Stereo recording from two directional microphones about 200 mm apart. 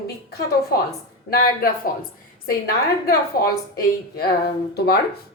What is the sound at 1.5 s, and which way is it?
Speech, 45° left (ahead or behind).